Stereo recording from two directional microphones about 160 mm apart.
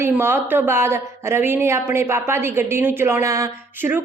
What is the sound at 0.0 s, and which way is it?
A woman's voice, 15° right (ahead or behind).